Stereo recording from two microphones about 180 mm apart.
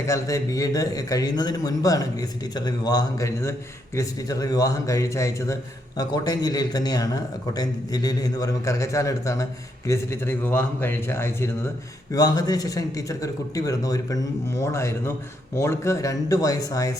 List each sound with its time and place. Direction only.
0.1 s a man's voice: 15° left (ahead or behind)